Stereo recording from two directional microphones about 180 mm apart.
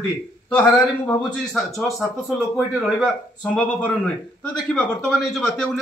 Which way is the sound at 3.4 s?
5° left (ahead or behind).